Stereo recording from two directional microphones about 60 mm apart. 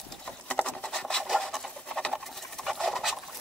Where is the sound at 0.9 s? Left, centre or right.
Centre.